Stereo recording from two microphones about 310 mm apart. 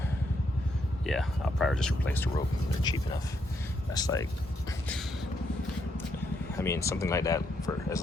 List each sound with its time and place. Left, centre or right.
1.0 s speech: centre
3.9 s speech: centre
6.6 s speech: centre